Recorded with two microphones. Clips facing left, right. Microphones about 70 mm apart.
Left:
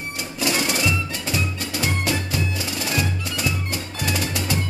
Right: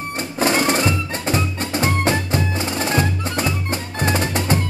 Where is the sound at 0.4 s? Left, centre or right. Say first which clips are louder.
Right 5 dB; right.